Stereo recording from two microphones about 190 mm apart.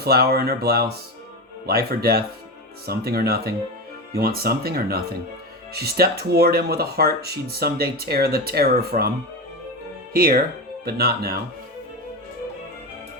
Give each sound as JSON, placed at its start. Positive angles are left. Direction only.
{"t": 0.0, "sound": "speech", "side_deg": -55}